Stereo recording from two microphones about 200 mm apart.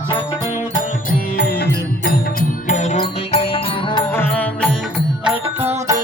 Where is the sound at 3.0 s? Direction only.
25° left (ahead or behind).